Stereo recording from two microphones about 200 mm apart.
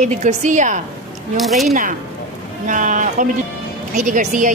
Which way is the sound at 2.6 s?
40° right (ahead or behind).